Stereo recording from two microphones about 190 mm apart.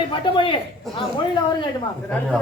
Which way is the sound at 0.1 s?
25° left (ahead or behind).